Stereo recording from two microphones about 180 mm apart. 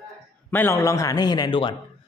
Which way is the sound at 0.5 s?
10° left (ahead or behind).